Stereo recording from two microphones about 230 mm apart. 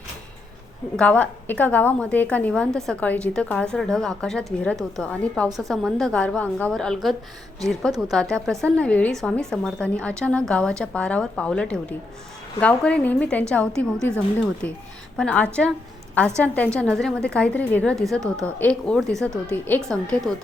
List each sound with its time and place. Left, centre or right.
0.9 s a woman's voice: centre